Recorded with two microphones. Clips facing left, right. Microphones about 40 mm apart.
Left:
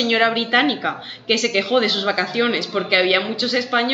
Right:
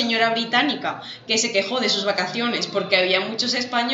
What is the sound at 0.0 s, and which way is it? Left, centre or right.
A woman's voice, centre.